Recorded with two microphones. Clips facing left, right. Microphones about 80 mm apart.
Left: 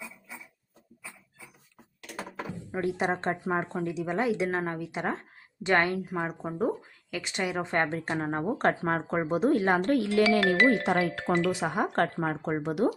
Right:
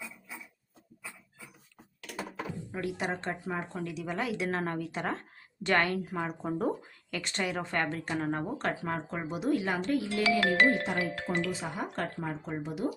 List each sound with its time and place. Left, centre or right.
2.0 s thunk: left
2.7 s speech: left
3.8 s speech: left
8.5 s speech: left